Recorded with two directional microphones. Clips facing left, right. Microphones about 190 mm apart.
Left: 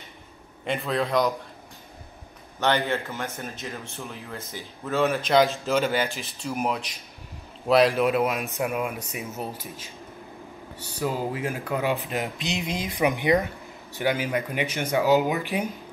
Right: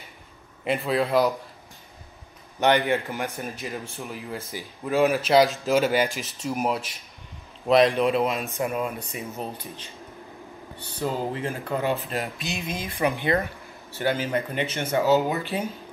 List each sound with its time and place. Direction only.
0.7 s speech: 5° right (ahead or behind)
2.6 s speech: 15° right (ahead or behind); by 15.7 s 15° left (ahead or behind)